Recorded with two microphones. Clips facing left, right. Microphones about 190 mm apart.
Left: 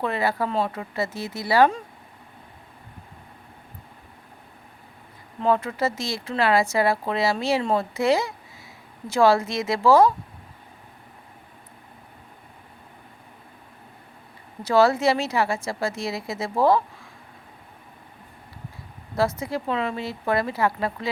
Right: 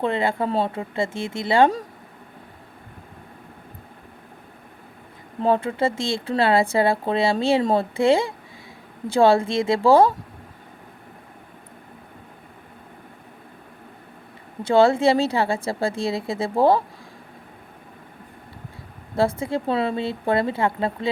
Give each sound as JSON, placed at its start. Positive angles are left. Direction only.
{"t": 0.0, "sound": "speech", "side_deg": -25}
{"t": 5.4, "sound": "speech", "side_deg": -30}
{"t": 14.6, "sound": "speech", "side_deg": -25}
{"t": 19.4, "sound": "speech", "side_deg": -30}